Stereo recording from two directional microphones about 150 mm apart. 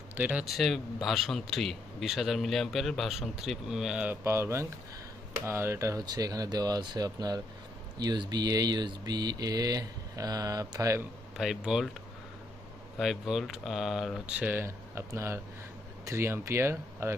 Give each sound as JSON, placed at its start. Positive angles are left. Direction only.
{"t": 0.2, "sound": "a man's voice", "side_deg": -10}
{"t": 11.3, "sound": "a man's voice", "side_deg": -5}
{"t": 13.0, "sound": "a man's voice", "side_deg": 0}
{"t": 14.3, "sound": "speech", "side_deg": -10}